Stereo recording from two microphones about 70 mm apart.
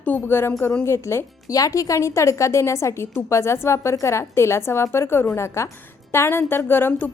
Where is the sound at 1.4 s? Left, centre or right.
Left.